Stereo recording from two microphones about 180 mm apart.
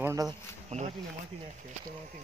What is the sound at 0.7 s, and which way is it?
Speech, 40° right (ahead or behind).